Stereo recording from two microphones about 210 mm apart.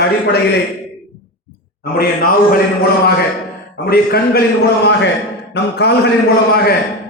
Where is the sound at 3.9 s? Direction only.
45° left (ahead or behind).